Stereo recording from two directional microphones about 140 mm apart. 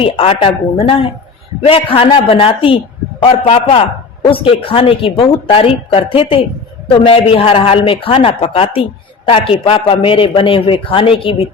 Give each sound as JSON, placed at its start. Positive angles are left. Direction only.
{"t": 0.0, "sound": "a man's voice", "side_deg": 40}